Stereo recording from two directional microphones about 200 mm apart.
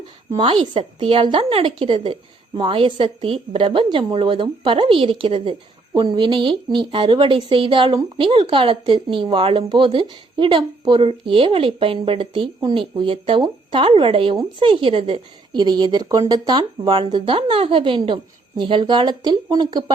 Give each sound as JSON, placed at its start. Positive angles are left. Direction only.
{"t": 0.3, "sound": "a woman's voice", "side_deg": -25}